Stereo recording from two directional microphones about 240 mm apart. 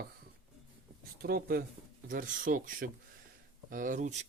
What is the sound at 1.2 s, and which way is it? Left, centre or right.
Speech, right.